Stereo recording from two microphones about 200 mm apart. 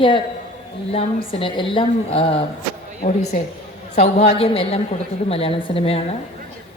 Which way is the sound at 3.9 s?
35° left (ahead or behind).